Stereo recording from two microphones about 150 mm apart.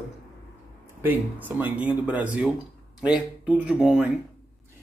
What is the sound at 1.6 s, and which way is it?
Speech, 10° right (ahead or behind).